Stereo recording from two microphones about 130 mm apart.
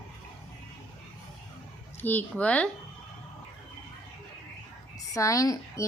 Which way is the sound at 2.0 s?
10° left (ahead or behind).